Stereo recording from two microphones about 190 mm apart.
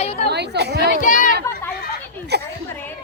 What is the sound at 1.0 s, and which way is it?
Speech, 45° left (ahead or behind).